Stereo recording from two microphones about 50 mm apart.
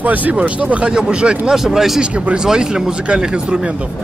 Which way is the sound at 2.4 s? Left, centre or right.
Centre.